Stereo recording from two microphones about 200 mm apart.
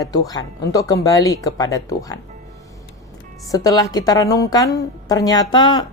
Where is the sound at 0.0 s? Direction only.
20° left (ahead or behind).